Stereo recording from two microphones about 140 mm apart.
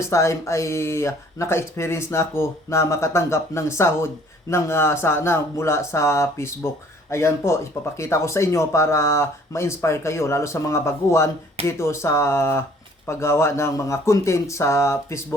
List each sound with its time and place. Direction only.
0.1 s speech: 20° left (ahead or behind)